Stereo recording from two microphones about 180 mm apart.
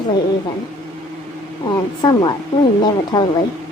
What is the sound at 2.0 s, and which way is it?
Speech, 25° left (ahead or behind).